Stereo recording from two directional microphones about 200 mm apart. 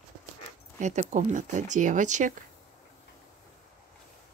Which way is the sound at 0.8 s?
35° right (ahead or behind).